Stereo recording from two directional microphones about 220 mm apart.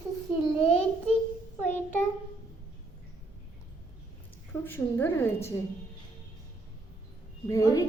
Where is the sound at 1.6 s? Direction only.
10° left (ahead or behind).